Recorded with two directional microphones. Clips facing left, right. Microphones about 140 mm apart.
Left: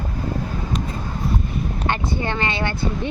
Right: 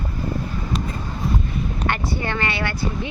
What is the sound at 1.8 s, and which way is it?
Speech, 20° left (ahead or behind).